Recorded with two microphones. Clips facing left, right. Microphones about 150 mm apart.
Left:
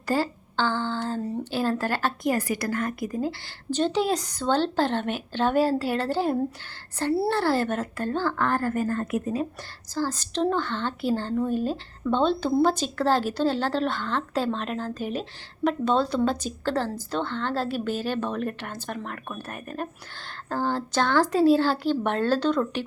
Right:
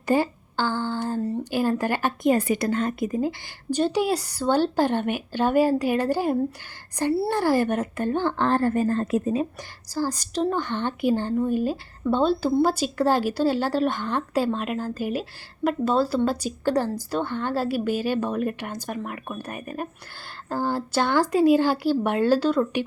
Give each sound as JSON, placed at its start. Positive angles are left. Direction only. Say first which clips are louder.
{"t": 0.0, "sound": "a woman's voice", "louder": "right 3 dB", "side_deg": -20}
{"t": 9.9, "sound": "speech", "louder": "right 1 dB", "side_deg": -10}